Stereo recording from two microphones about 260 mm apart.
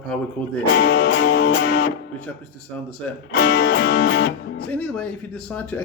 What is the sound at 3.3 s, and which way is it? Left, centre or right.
Music, left.